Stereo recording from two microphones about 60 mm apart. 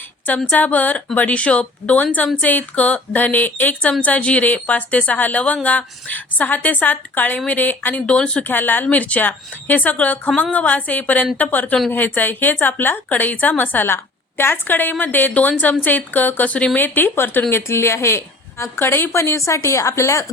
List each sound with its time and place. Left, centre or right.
0.3 s a woman's voice: left
8.0 s speech: centre
8.4 s a woman's voice: left
17.5 s speech: left
18.8 s a woman's voice: left
19.1 s a woman's voice: left